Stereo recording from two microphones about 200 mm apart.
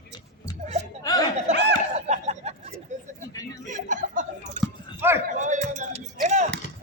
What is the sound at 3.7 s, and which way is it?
Chuckle, 40° right (ahead or behind).